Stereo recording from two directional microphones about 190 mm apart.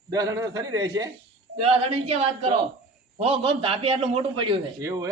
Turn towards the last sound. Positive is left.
turn(degrees=-15)  # may be behind; listen again after turning